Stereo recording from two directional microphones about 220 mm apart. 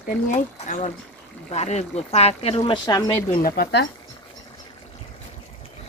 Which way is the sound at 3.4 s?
45° left (ahead or behind).